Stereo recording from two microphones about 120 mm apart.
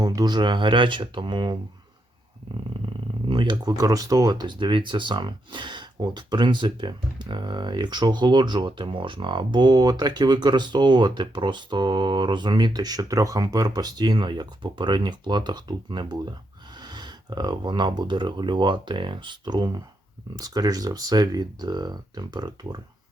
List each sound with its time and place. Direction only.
0.0 s speech: 30° right (ahead or behind)
3.2 s speech: 40° right (ahead or behind)